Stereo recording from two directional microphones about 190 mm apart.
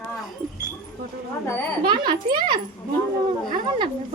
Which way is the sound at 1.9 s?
25° right (ahead or behind).